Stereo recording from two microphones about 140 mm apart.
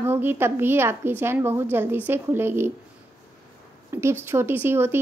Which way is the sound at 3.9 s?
20° right (ahead or behind).